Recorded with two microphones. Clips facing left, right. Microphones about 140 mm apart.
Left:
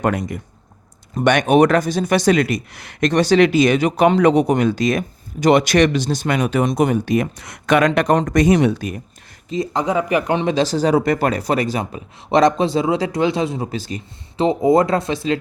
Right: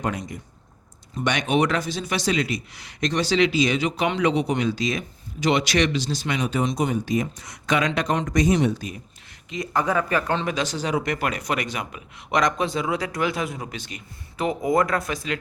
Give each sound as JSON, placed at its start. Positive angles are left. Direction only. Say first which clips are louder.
{"t": 0.0, "sound": "speech", "louder": "left 8 dB", "side_deg": 60}
{"t": 8.4, "sound": "speech", "louder": "left 3 dB", "side_deg": 65}
{"t": 9.7, "sound": "speech", "louder": "left 3 dB", "side_deg": 20}
{"t": 10.5, "sound": "a man's voice", "louder": "left 9 dB", "side_deg": 35}